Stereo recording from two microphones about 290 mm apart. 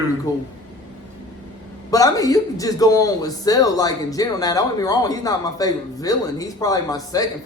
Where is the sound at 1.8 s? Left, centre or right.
Centre.